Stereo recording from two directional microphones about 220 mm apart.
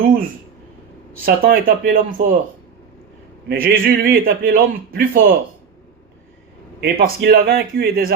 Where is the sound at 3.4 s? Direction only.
40° right (ahead or behind).